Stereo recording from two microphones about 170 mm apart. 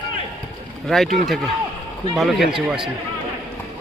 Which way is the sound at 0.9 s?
Centre (ahead or behind).